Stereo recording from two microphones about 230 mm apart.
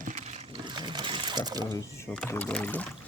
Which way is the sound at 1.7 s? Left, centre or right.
Centre.